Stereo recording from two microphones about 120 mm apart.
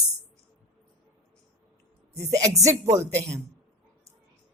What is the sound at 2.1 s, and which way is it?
Speech, 25° right (ahead or behind).